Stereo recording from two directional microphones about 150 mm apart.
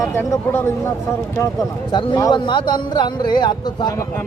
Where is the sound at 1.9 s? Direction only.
30° left (ahead or behind).